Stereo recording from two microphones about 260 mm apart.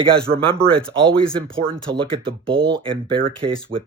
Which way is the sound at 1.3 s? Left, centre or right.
Centre.